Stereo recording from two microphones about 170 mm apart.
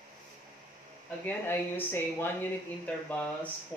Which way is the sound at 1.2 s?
10° left (ahead or behind).